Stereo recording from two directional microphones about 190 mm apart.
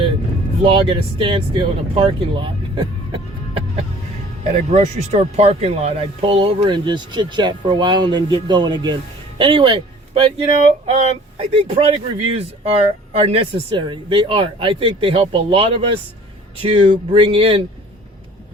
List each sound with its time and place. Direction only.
0.6 s speech: 30° right (ahead or behind)
4.7 s speech: 35° right (ahead or behind)